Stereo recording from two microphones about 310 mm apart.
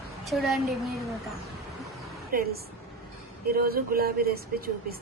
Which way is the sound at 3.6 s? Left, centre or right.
Right.